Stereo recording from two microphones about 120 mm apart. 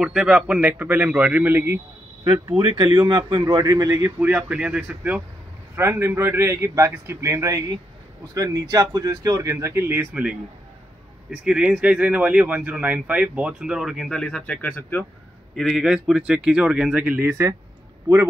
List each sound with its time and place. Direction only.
0.0 s a man's voice: 5° right (ahead or behind)
2.8 s a man's voice: 35° right (ahead or behind); by 5.2 s 10° right (ahead or behind)
5.8 s a man's voice: 20° right (ahead or behind); by 15.0 s 10° left (ahead or behind)
15.5 s speech: centre (ahead or behind)
17.3 s a man's voice: 25° right (ahead or behind)